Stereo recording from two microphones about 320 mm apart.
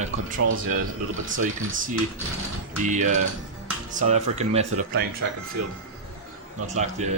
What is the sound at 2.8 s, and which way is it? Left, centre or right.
Speech, right.